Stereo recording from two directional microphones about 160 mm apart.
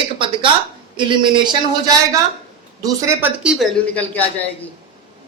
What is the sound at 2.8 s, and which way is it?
Speech, 15° right (ahead or behind).